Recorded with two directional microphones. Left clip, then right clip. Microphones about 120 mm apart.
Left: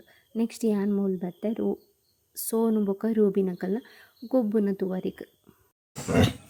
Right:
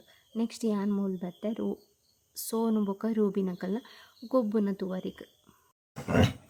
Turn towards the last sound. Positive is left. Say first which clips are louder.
# left 3 dB
turn(degrees=-85)